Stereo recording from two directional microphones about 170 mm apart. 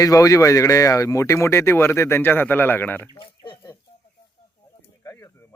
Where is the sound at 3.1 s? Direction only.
30° left (ahead or behind).